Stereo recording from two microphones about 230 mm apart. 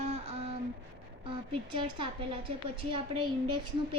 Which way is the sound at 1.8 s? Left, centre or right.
Right.